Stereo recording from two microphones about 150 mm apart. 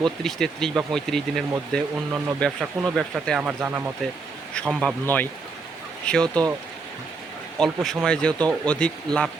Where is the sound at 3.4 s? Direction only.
10° right (ahead or behind).